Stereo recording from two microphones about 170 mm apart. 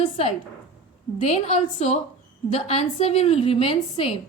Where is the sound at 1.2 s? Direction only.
40° left (ahead or behind).